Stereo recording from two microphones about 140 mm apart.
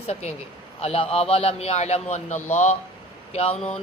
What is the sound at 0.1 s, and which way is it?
Speech, 50° left (ahead or behind).